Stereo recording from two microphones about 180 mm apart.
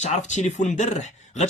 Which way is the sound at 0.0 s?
40° left (ahead or behind).